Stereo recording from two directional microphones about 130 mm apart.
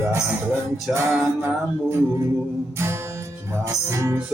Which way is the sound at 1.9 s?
15° right (ahead or behind).